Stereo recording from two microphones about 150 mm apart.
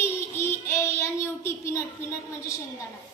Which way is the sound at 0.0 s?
15° left (ahead or behind).